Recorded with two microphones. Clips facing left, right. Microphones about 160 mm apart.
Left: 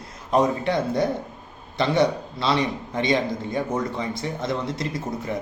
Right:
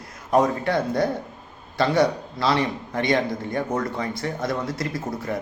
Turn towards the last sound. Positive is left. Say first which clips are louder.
# even
turn(degrees=20)  # may be behind; listen again after turning